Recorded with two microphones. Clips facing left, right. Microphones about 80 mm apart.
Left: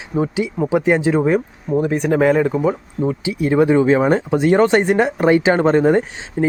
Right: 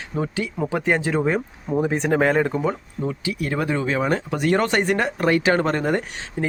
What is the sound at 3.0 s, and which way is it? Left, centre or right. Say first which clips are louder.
Speech: left 6 dB; left.